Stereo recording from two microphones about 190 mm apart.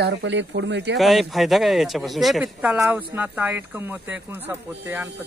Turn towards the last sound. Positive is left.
turn(degrees=-10)  # may be behind; listen again after turning